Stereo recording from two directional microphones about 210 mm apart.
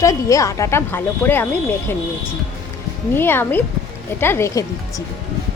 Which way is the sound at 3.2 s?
10° left (ahead or behind).